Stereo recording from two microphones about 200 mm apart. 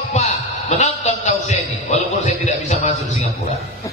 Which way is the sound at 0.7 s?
35° left (ahead or behind).